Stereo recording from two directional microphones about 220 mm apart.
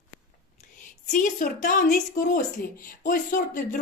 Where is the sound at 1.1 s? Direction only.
35° left (ahead or behind).